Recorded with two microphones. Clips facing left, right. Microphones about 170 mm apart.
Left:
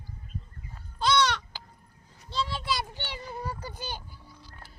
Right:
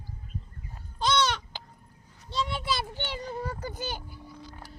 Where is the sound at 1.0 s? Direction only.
20° right (ahead or behind).